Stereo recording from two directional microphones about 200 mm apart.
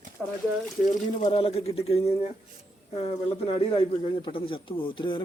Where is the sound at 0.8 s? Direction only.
35° left (ahead or behind).